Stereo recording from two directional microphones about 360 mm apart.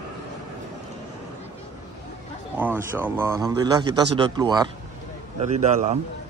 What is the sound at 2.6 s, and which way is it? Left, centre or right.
A man's voice, centre.